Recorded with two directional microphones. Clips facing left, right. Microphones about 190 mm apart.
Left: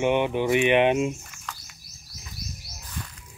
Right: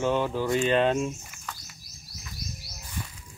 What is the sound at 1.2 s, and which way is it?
Bird, 10° right (ahead or behind).